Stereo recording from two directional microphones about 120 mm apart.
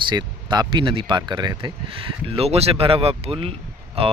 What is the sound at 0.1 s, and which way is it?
Speech, 35° right (ahead or behind).